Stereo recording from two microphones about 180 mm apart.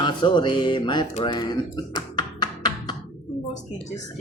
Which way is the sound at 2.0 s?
25° left (ahead or behind).